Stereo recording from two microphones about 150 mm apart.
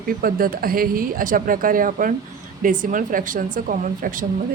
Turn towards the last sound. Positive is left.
turn(degrees=-65)  # may be behind; listen again after turning